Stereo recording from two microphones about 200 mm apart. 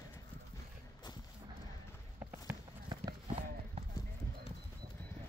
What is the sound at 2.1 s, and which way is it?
Run, 15° right (ahead or behind).